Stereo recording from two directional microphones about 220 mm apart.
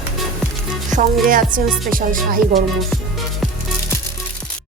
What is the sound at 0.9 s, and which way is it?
Speech, 40° right (ahead or behind).